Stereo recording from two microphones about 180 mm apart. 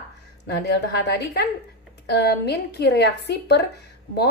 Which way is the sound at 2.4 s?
65° left (ahead or behind).